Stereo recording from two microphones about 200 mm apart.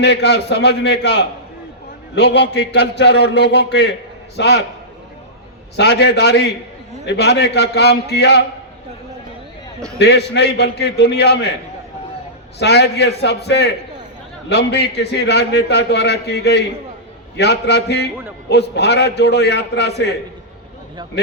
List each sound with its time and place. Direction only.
0.0 s a man's voice: 55° left (ahead or behind)
5.7 s a man's voice: 60° left (ahead or behind)
10.0 s a man's voice: 55° left (ahead or behind)
12.5 s a man's voice: 55° left (ahead or behind)